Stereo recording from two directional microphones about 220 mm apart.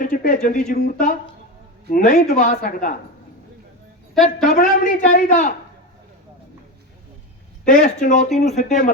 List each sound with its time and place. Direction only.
0.0 s a man's voice: 40° left (ahead or behind)
4.1 s a woman's voice: centre (ahead or behind)
4.4 s a man's voice: 40° left (ahead or behind)
7.6 s a man's voice: 35° left (ahead or behind)